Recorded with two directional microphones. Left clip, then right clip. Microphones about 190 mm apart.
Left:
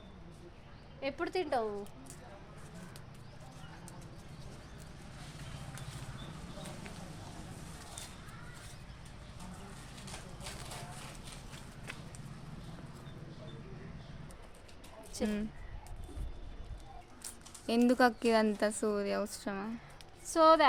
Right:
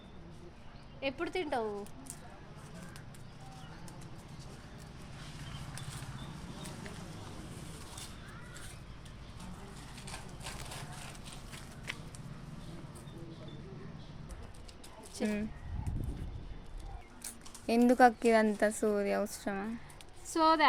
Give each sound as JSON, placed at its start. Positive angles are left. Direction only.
{"t": 1.0, "sound": "speech", "side_deg": 15}
{"t": 15.2, "sound": "speech", "side_deg": 0}
{"t": 17.2, "sound": "speech", "side_deg": -5}
{"t": 20.3, "sound": "a woman's voice", "side_deg": 25}